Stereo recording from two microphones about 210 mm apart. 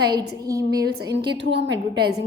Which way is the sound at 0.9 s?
50° right (ahead or behind).